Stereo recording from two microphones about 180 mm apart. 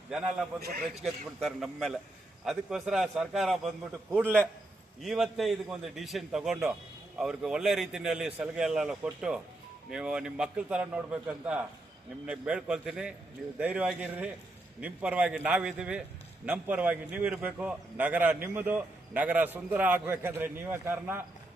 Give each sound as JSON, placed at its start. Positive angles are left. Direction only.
{"t": 0.1, "sound": "a man's voice", "side_deg": -5}